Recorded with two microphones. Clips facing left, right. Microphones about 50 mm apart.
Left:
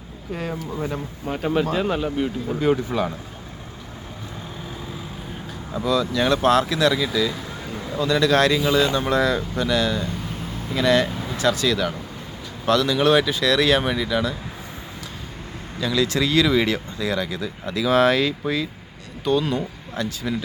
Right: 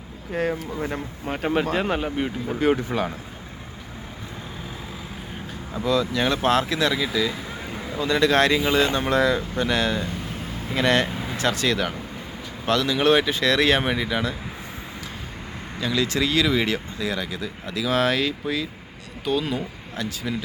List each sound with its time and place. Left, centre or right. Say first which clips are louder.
0.3 s speech: right 3 dB; right
5.9 s speech: left 2 dB; centre
11.0 s a sound: left 1 dB; centre
11.3 s speech: left 2 dB; right
12.6 s speech: left 2 dB; centre
15.8 s speech: left 2 dB; centre